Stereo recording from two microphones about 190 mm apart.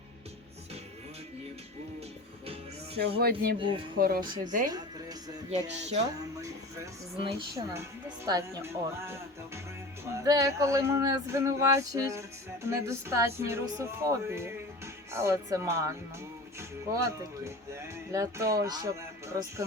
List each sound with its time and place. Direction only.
3.0 s speech: 55° right (ahead or behind)
4.2 s speech: 25° right (ahead or behind)
5.5 s speech: 35° right (ahead or behind)
7.2 s speech: 25° right (ahead or behind)
7.7 s a sound: 15° right (ahead or behind)
16.6 s speech: 15° right (ahead or behind)